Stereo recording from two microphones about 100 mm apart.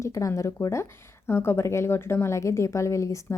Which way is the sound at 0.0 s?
30° left (ahead or behind).